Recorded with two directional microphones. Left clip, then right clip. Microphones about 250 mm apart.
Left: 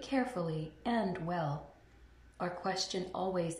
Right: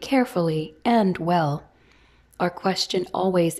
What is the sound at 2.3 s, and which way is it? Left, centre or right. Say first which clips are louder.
Speech: right 12 dB; right.